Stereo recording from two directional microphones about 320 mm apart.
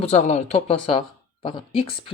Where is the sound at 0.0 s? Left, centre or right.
Left.